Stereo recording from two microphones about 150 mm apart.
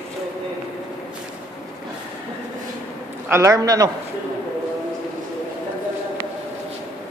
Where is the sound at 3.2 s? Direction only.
20° right (ahead or behind).